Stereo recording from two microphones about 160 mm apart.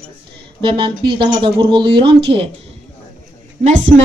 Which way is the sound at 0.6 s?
30° right (ahead or behind).